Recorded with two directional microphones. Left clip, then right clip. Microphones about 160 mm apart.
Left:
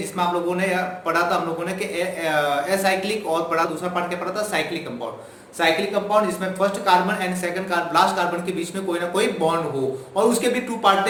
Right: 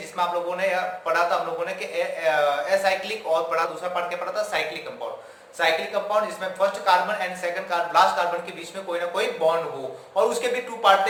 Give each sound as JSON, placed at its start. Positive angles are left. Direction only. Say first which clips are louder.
{"t": 0.2, "sound": "speech", "louder": "left 2 dB", "side_deg": 0}